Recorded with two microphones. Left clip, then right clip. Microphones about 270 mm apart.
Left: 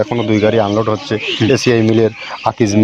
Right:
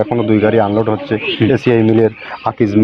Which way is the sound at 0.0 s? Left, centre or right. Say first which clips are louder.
Right 1 dB; left.